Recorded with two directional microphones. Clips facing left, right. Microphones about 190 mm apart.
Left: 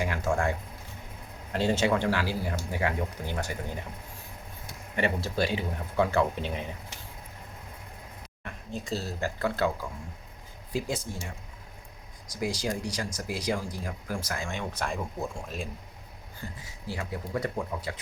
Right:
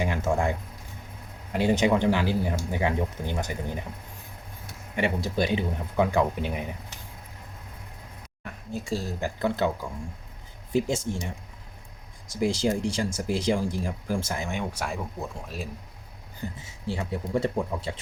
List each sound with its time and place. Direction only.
0.0 s a sound: 20° right (ahead or behind)
1.5 s speech: 15° right (ahead or behind)
4.9 s speech: 15° right (ahead or behind)
8.4 s speech: 10° right (ahead or behind)
10.7 s speech: 25° right (ahead or behind)
12.3 s speech: 25° right (ahead or behind); by 15.7 s 5° right (ahead or behind)
16.4 s speech: 20° right (ahead or behind)